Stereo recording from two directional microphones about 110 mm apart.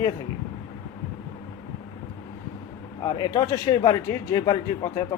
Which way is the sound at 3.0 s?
40° left (ahead or behind).